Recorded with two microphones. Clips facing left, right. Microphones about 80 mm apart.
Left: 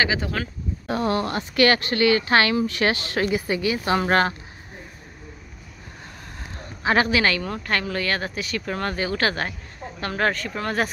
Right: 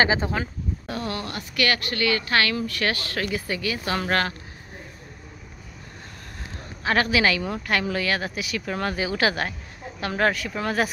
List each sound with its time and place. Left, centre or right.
0.0 s speech: right
0.8 s speech: left
6.8 s a man's voice: centre
7.1 s speech: centre